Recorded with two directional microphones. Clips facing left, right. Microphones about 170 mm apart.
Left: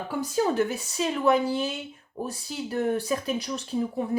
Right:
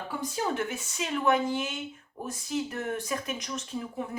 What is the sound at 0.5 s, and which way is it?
Speech, 35° left (ahead or behind).